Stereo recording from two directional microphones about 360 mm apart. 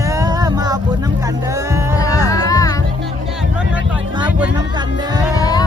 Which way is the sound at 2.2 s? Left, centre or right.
Centre.